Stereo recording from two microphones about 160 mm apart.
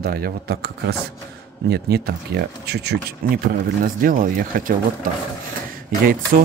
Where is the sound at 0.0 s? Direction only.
75° right (ahead or behind).